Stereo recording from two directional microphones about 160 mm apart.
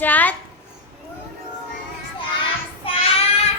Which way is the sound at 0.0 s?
10° left (ahead or behind).